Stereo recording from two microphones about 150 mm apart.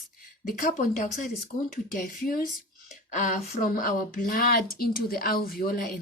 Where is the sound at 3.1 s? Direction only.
55° left (ahead or behind).